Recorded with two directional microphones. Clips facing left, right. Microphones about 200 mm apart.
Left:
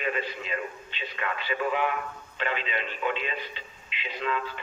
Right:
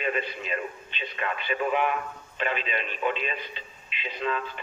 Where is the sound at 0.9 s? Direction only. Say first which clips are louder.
Right 1 dB; 20° right (ahead or behind).